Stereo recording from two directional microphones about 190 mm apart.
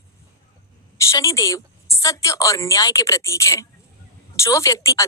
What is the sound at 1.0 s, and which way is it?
Speech, 15° left (ahead or behind).